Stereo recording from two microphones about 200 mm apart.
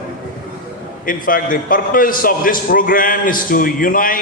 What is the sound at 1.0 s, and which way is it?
A man's voice, 45° left (ahead or behind).